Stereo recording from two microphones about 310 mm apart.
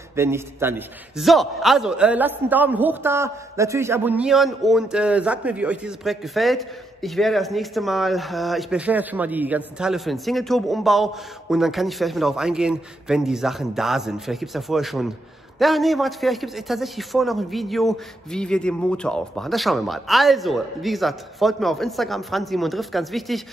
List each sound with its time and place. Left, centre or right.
0.1 s a man's voice: centre